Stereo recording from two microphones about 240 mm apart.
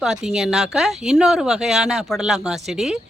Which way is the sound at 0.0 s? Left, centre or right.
Centre.